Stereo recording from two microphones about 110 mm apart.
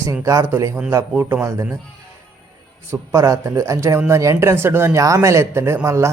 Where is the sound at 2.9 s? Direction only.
30° right (ahead or behind).